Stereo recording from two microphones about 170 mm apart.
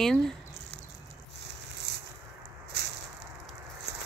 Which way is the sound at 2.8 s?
75° right (ahead or behind).